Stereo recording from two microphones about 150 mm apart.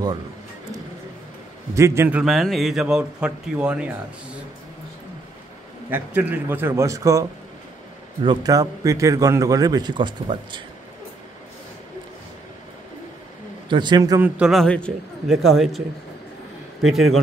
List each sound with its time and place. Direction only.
1.8 s a man's voice: 20° right (ahead or behind)
5.9 s a man's voice: 10° right (ahead or behind); by 10.6 s 30° right (ahead or behind)
13.7 s a man's voice: 30° right (ahead or behind)
14.2 s a man's voice: 5° right (ahead or behind)
16.8 s a man's voice: centre (ahead or behind)